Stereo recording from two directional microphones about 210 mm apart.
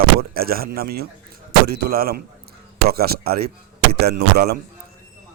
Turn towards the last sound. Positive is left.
turn(degrees=-50)  # may be behind; listen again after turning